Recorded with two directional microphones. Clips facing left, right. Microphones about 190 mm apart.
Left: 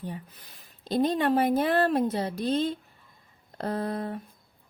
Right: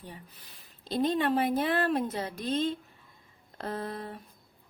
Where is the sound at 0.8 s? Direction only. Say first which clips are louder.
Left 3 dB; 40° left (ahead or behind).